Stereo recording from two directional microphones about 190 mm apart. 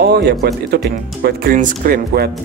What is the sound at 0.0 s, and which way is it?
Speech, 60° right (ahead or behind).